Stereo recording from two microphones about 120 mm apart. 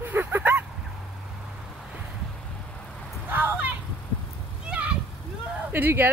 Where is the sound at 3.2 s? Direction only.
15° right (ahead or behind).